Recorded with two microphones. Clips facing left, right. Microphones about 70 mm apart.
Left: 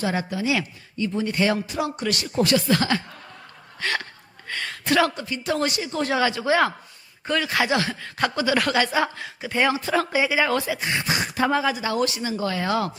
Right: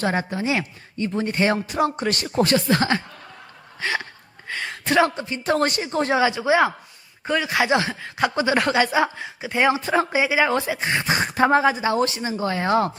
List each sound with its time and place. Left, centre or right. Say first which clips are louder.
0.1 s speech: right 1 dB; right
3.8 s speech: right 1 dB; centre
4.4 s a sound: even; centre
5.4 s speech: right 4 dB; right
6.1 s speech: right 2 dB; centre